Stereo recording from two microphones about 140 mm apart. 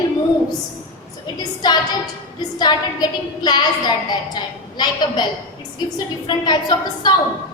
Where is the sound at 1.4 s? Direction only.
30° left (ahead or behind).